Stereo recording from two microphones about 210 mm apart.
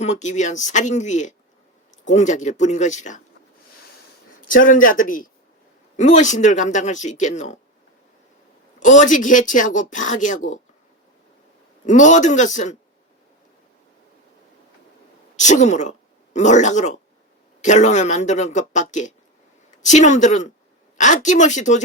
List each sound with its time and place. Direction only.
0.0 s speech: 35° left (ahead or behind)
4.4 s speech: 40° left (ahead or behind)
8.8 s speech: 35° left (ahead or behind)
11.9 s speech: 35° left (ahead or behind)
15.4 s speech: 35° left (ahead or behind)